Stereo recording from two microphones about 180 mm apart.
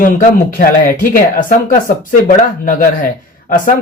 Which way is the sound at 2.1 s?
50° left (ahead or behind).